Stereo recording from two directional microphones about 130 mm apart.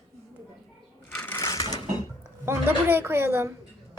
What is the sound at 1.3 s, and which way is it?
Sewing machine, 25° left (ahead or behind).